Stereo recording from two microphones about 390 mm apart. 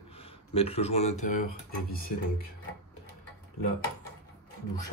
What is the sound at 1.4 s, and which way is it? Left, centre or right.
Speech, left.